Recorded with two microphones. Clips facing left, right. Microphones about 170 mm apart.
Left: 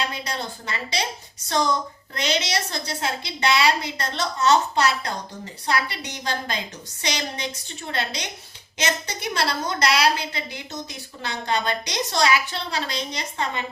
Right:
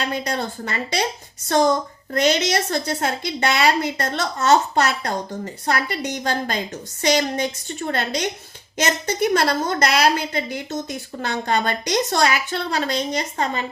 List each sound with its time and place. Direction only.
0.1 s a woman's voice: 50° right (ahead or behind)